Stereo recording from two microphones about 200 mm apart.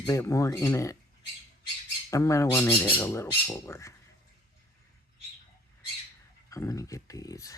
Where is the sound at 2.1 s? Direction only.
15° left (ahead or behind).